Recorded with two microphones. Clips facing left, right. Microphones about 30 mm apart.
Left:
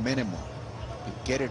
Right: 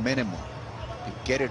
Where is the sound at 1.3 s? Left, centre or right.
Centre.